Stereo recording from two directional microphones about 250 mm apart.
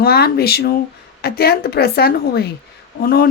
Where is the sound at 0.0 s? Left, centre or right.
Left.